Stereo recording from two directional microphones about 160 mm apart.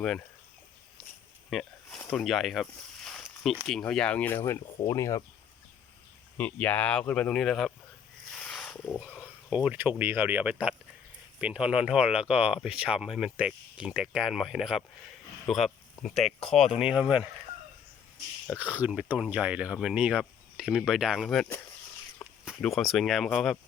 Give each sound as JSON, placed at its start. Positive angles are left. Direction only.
{"t": 1.5, "sound": "speech", "side_deg": 0}
{"t": 6.3, "sound": "speech", "side_deg": 10}
{"t": 8.3, "sound": "a sound", "side_deg": 5}
{"t": 9.0, "sound": "speech", "side_deg": -5}
{"t": 18.5, "sound": "speech", "side_deg": -10}